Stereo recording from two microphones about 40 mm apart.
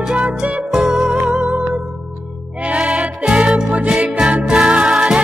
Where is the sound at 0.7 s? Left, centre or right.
Centre.